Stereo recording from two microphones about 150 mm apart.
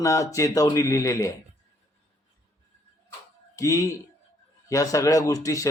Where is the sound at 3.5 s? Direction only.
20° left (ahead or behind).